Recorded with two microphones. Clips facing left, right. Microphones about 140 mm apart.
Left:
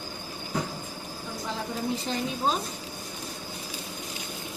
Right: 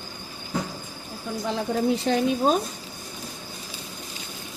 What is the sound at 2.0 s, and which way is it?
Speech, 65° right (ahead or behind).